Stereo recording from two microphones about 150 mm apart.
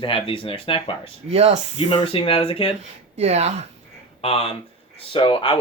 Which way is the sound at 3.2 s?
50° right (ahead or behind).